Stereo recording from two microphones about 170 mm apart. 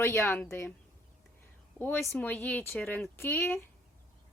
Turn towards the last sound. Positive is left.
turn(degrees=15)  # may be behind; listen again after turning